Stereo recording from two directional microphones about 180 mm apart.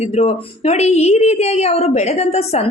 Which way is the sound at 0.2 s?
35° left (ahead or behind).